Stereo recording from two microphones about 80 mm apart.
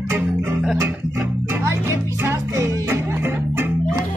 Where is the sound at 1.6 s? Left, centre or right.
Right.